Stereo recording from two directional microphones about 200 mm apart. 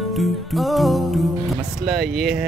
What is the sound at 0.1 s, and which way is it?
Speech, centre (ahead or behind).